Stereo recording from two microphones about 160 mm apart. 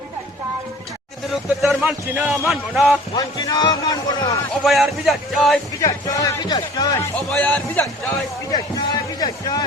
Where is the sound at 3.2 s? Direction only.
25° left (ahead or behind).